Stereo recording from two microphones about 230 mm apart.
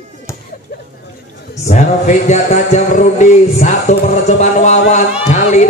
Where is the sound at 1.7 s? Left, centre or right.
Left.